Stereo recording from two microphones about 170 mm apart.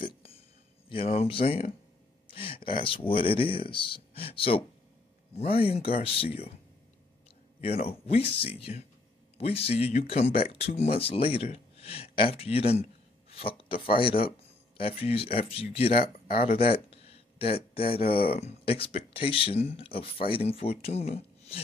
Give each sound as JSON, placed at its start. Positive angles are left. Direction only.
{"t": 0.8, "sound": "speech", "side_deg": 35}
{"t": 2.2, "sound": "a sound", "side_deg": 30}
{"t": 3.1, "sound": "speech", "side_deg": 30}
{"t": 7.6, "sound": "speech", "side_deg": 35}
{"t": 16.7, "sound": "a sound", "side_deg": 35}
{"t": 18.4, "sound": "speech", "side_deg": 35}